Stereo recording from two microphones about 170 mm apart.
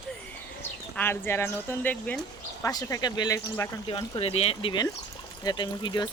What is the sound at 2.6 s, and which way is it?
Speech, 20° left (ahead or behind).